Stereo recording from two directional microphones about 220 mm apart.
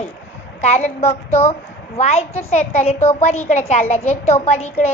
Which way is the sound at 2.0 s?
30° left (ahead or behind).